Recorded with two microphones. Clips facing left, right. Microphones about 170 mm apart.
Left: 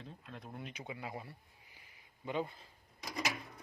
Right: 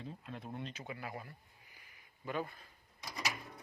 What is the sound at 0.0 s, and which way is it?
Speech, centre (ahead or behind).